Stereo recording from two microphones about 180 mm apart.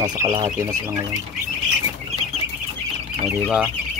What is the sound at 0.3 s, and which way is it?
Speech, 25° right (ahead or behind).